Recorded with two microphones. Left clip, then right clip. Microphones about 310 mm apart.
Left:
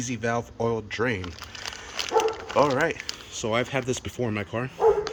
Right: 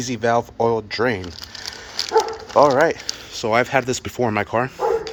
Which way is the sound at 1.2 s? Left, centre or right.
Left.